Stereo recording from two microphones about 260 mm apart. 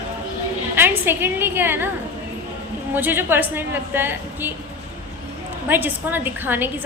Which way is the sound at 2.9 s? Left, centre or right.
Centre.